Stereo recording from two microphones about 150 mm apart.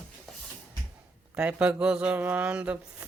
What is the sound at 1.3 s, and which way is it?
Speech, 5° right (ahead or behind).